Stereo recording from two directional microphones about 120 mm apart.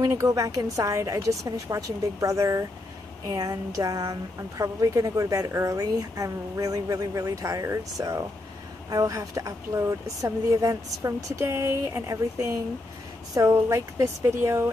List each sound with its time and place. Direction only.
0.0 s a woman's voice: 25° right (ahead or behind)